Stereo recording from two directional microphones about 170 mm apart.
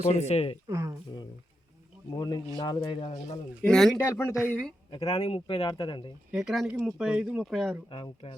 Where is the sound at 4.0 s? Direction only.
15° left (ahead or behind).